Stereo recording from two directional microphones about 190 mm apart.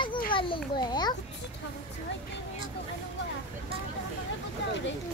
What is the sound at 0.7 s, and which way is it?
Speech, 20° left (ahead or behind).